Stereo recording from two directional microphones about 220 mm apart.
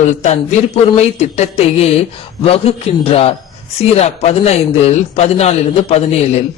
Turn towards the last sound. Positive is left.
turn(degrees=30)  # may be behind; listen again after turning